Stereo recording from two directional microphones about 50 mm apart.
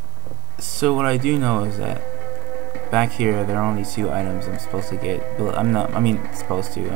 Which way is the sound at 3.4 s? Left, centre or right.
Centre.